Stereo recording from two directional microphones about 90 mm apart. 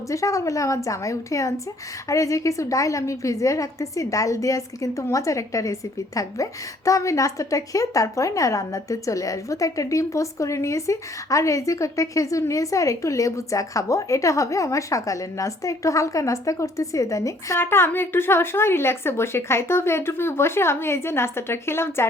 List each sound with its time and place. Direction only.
0.1 s a woman's voice: 35° left (ahead or behind)
17.6 s speech: 25° left (ahead or behind)